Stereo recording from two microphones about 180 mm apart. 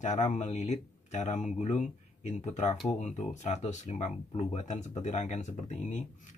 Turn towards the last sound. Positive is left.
turn(degrees=40)  # may be behind; listen again after turning